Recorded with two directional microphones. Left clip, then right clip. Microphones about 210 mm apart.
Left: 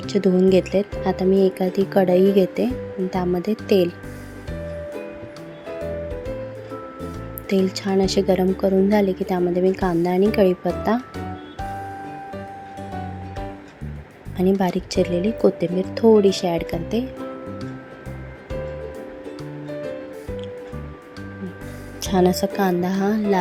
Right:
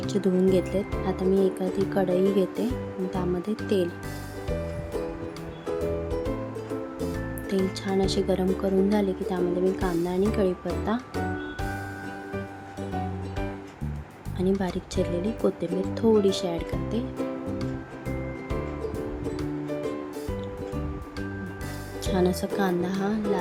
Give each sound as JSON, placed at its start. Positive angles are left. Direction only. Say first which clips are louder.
{"t": 0.0, "sound": "a woman's voice", "louder": "left 6 dB", "side_deg": 20}
{"t": 7.5, "sound": "a woman's voice", "louder": "left 7 dB", "side_deg": 20}
{"t": 14.6, "sound": "a woman's voice", "louder": "left 8 dB", "side_deg": 25}
{"t": 22.0, "sound": "a woman's voice", "louder": "left 7 dB", "side_deg": 25}